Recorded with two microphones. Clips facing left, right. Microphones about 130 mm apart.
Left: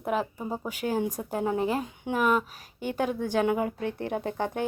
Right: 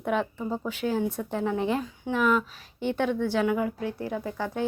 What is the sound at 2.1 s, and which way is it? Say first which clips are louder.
Speech: right 1 dB; 45° left (ahead or behind).